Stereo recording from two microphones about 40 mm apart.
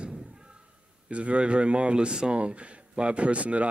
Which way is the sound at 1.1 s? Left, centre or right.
Right.